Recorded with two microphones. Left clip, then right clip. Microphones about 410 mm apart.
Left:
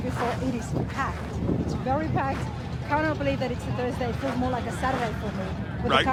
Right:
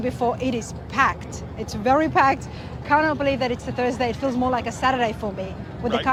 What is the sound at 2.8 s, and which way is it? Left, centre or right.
Speech, right.